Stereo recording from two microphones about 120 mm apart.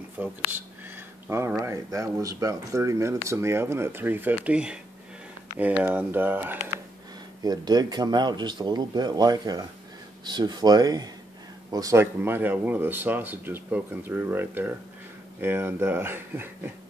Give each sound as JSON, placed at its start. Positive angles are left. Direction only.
{"t": 0.2, "sound": "speech", "side_deg": -15}
{"t": 7.4, "sound": "speech", "side_deg": -35}